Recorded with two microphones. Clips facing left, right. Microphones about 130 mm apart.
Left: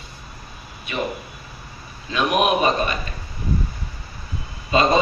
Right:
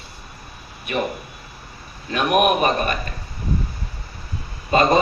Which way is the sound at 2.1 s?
50° right (ahead or behind).